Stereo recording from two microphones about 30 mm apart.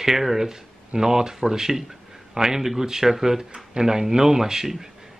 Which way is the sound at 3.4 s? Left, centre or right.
Right.